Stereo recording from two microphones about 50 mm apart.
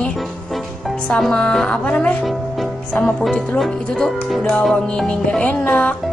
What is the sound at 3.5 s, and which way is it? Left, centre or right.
Speech, centre.